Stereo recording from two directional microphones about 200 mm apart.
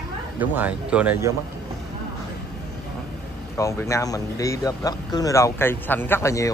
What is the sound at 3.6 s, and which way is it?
Speech, 15° left (ahead or behind).